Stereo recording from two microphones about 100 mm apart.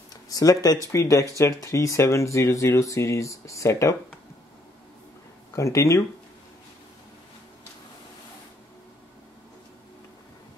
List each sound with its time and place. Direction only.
0.3 s speech: 35° left (ahead or behind)
5.6 s speech: 30° left (ahead or behind)